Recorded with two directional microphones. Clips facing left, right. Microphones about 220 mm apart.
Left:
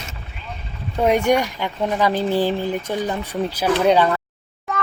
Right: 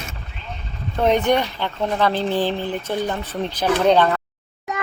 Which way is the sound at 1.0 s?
10° left (ahead or behind).